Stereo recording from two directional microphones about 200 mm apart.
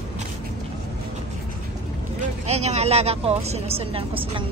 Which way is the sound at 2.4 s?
35° right (ahead or behind).